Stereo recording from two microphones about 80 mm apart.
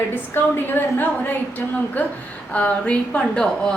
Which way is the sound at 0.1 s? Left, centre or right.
Left.